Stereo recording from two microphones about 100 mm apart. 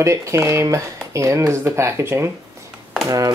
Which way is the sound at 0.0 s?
30° right (ahead or behind).